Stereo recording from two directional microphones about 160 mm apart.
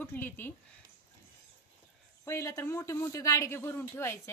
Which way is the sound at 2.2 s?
20° left (ahead or behind).